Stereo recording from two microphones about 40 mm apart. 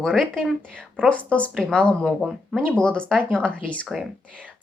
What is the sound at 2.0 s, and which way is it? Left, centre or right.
A woman's voice, centre.